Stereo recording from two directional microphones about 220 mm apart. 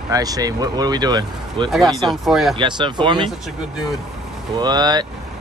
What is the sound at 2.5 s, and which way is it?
Speech, 20° right (ahead or behind).